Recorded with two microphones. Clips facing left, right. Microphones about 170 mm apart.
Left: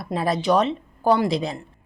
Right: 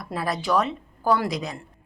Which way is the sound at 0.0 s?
25° left (ahead or behind).